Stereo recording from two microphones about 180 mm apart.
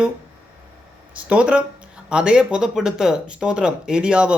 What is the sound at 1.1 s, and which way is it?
A man's voice, 5° right (ahead or behind).